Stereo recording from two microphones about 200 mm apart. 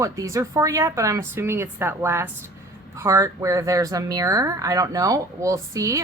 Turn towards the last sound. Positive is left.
turn(degrees=-15)  # may be behind; listen again after turning